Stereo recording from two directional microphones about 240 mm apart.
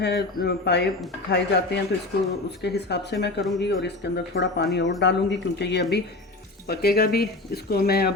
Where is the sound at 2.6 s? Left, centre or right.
Left.